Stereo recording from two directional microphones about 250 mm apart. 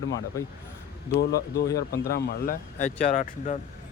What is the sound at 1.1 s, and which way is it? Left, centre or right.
Speech, left.